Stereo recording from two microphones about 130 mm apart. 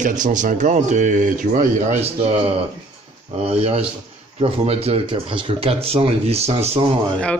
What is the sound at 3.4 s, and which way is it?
Speech, 50° right (ahead or behind).